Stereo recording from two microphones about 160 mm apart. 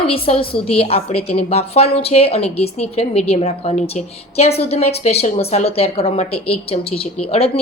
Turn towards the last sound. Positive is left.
turn(degrees=40)  # may be behind; listen again after turning